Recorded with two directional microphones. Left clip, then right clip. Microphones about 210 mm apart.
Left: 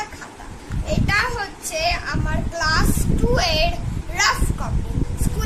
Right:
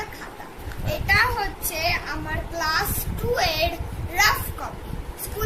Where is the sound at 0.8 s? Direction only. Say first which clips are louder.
Even; 20° left (ahead or behind).